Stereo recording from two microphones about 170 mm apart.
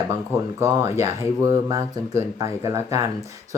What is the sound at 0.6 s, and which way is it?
Speech, 20° right (ahead or behind).